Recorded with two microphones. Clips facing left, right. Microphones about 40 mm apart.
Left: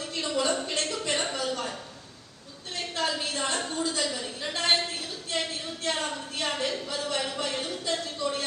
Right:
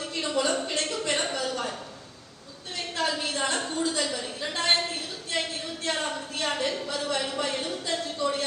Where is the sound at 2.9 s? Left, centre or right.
Right.